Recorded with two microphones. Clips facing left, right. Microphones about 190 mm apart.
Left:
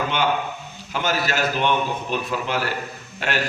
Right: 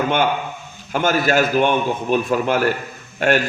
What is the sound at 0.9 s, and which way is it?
A man's voice, 50° right (ahead or behind).